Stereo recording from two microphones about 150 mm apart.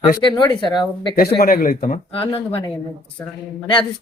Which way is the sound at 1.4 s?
80° left.